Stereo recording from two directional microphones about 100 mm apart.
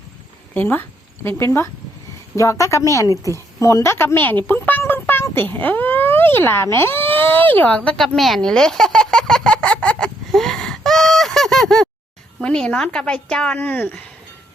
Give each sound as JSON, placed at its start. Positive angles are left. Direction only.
{"t": 0.5, "sound": "a woman's voice", "side_deg": 20}
{"t": 7.9, "sound": "a sound", "side_deg": 0}
{"t": 12.4, "sound": "speech", "side_deg": 10}